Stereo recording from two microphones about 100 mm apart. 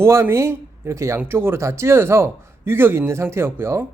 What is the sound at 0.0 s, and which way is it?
Speech, 25° right (ahead or behind).